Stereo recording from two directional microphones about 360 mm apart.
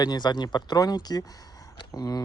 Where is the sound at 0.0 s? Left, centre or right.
Centre.